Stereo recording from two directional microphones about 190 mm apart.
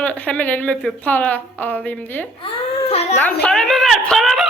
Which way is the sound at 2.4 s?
30° left (ahead or behind).